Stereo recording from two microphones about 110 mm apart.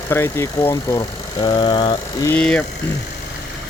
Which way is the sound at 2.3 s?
10° left (ahead or behind).